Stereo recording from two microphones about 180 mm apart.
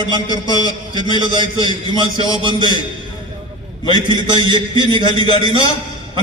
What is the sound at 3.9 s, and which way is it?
A man's voice, 25° right (ahead or behind).